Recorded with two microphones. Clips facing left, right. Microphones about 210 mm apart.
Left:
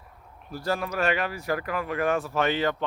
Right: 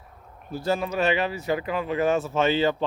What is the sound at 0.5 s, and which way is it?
Speech, 25° right (ahead or behind).